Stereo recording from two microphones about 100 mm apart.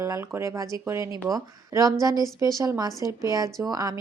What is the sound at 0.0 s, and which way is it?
Speech, 30° right (ahead or behind).